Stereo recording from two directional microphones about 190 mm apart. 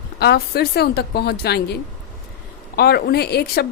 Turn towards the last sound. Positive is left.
turn(degrees=60)  # may be behind; listen again after turning